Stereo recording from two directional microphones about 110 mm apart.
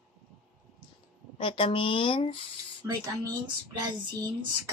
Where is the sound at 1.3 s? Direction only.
55° left (ahead or behind).